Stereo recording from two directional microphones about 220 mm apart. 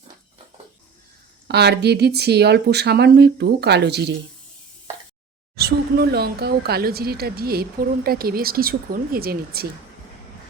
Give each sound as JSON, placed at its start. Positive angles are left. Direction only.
{"t": 1.5, "sound": "speech", "side_deg": -50}
{"t": 5.5, "sound": "speech", "side_deg": -45}